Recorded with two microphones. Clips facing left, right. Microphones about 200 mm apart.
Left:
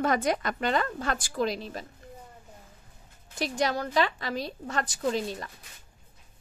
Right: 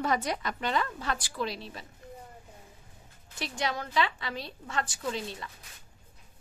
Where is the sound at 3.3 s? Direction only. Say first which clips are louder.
Left 5 dB; 40° left (ahead or behind).